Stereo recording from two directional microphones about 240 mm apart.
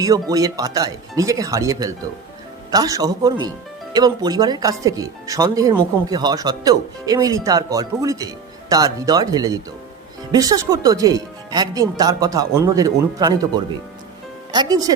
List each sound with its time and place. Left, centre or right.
0.0 s speech: centre
14.5 s speech: centre